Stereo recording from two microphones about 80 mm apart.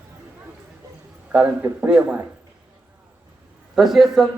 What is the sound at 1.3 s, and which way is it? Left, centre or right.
Speech, right.